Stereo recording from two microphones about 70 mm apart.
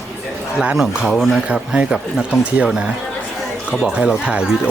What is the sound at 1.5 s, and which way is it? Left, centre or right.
Speech, centre.